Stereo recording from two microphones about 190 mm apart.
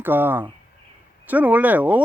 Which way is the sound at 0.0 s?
10° right (ahead or behind).